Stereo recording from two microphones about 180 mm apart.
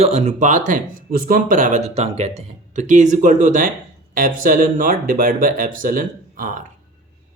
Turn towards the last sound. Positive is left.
turn(degrees=-50)  # may be behind; listen again after turning